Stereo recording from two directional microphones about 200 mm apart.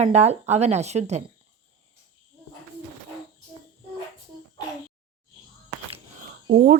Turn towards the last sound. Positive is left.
turn(degrees=-45)  # may be behind; listen again after turning